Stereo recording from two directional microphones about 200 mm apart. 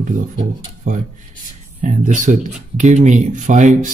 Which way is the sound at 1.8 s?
40° right (ahead or behind).